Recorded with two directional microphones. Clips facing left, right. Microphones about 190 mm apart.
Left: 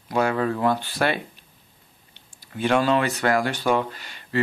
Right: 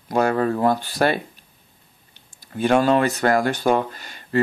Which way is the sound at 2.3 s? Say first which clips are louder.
Right 3 dB; 45° right (ahead or behind).